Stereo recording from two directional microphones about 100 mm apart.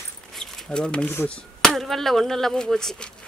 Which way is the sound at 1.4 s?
5° left (ahead or behind).